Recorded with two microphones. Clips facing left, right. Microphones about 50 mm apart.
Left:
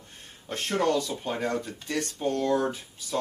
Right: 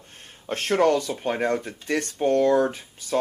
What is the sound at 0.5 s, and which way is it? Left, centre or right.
Speech, right.